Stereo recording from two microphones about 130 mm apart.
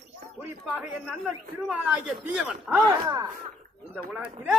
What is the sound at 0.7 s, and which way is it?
Speech, centre (ahead or behind).